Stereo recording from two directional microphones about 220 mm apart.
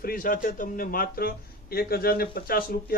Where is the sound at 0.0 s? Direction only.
40° left (ahead or behind).